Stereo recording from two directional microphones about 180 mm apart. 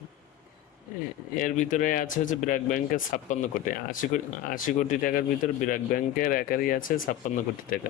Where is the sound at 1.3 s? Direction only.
45° left (ahead or behind).